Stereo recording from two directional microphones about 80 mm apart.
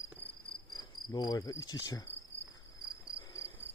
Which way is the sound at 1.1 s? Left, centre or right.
Left.